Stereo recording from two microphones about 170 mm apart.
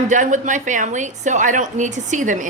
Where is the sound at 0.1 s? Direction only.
45° right (ahead or behind).